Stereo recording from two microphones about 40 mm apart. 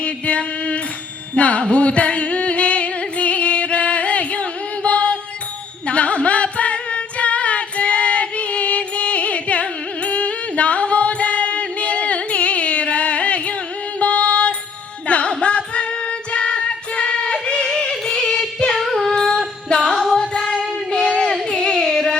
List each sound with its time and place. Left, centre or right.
0.0 s a sound: left
1.4 s music: left
5.9 s female singing: left
14.0 s music: left
18.8 s female singing: centre
19.1 s music: centre
20.2 s a sound: left